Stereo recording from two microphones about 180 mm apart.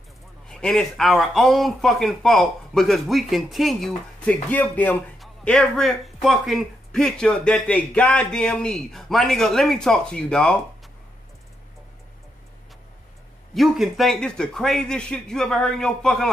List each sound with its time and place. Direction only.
0.5 s speech: 5° left (ahead or behind)
13.6 s speech: centre (ahead or behind)